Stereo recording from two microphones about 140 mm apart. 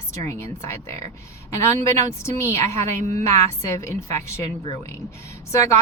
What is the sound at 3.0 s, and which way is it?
Speech, 55° right (ahead or behind).